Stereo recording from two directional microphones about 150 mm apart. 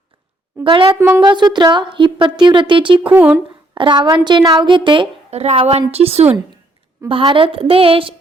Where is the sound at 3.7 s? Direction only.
30° right (ahead or behind).